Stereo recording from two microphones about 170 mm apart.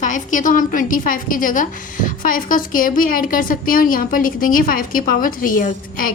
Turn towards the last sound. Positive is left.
turn(degrees=55)  # may be behind; listen again after turning